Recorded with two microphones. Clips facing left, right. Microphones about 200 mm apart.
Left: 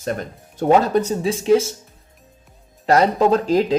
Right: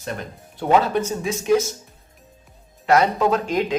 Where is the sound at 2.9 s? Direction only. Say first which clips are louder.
Left 3 dB; 35° left (ahead or behind).